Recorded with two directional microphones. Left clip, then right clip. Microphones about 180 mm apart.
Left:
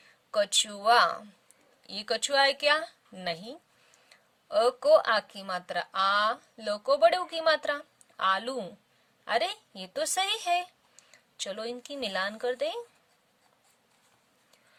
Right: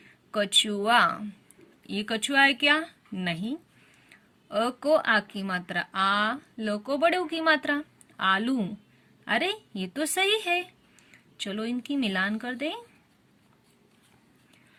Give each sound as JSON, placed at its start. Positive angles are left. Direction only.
{"t": 0.3, "sound": "speech", "side_deg": 50}
{"t": 4.4, "sound": "speech", "side_deg": 45}